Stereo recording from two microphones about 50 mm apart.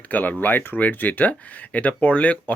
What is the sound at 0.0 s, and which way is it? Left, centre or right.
Speech, left.